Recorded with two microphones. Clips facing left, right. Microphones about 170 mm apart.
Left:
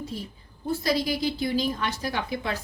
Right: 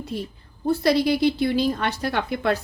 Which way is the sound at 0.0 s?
65° right (ahead or behind).